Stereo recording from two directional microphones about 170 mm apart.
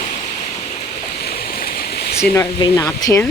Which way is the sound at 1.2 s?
60° left (ahead or behind).